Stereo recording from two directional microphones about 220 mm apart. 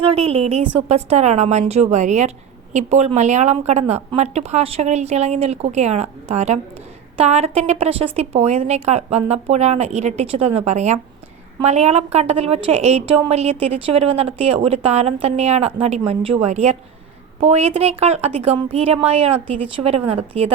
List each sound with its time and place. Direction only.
0.0 s a woman's voice: 25° right (ahead or behind)